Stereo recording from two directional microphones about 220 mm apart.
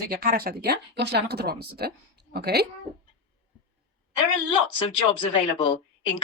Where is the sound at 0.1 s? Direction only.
45° right (ahead or behind).